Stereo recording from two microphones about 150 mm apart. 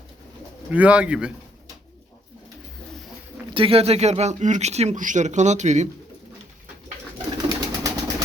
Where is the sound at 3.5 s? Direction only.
35° right (ahead or behind).